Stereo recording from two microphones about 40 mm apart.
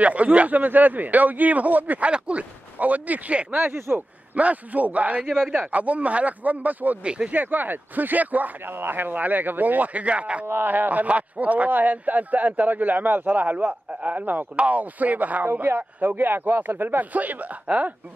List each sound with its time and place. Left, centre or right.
0.0 s speech: right
0.6 s speech: right
2.0 s speech: right
3.6 s speech: right
4.4 s speech: right
5.2 s speech: centre
5.6 s speech: right
8.7 s speech: right
9.1 s speech: right
10.4 s speech: right
10.7 s speech: right
17.1 s speech: right